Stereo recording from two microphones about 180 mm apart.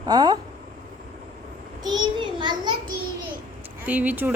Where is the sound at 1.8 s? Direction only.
25° right (ahead or behind).